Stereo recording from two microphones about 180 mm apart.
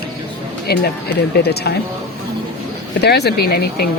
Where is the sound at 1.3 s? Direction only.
65° left (ahead or behind).